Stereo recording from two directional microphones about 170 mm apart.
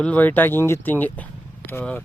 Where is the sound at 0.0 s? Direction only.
10° left (ahead or behind).